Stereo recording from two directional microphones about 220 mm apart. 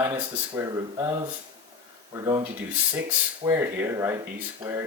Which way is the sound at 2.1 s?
20° right (ahead or behind).